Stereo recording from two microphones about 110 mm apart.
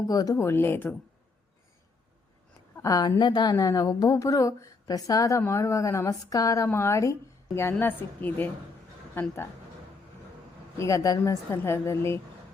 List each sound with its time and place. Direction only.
0.1 s a woman's voice: 35° left (ahead or behind)
0.3 s speech: 20° left (ahead or behind)
2.7 s a woman's voice: 30° left (ahead or behind)
3.2 s a woman's voice: 45° left (ahead or behind)
3.5 s a woman's voice: 30° left (ahead or behind)
10.8 s a woman's voice: 30° left (ahead or behind)
11.5 s speech: 25° left (ahead or behind)